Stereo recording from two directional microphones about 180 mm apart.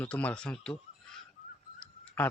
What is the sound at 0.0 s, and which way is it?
A man's voice, 10° left (ahead or behind).